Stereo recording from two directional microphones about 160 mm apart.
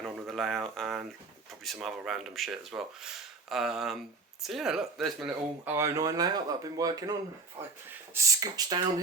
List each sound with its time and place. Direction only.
0.0 s a sound: centre (ahead or behind)
1.6 s speech: centre (ahead or behind)
5.6 s speech: 15° right (ahead or behind)